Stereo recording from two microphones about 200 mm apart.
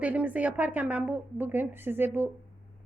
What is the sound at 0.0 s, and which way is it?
A woman's voice, 5° right (ahead or behind).